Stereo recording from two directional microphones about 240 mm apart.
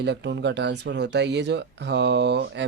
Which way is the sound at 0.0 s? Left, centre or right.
Right.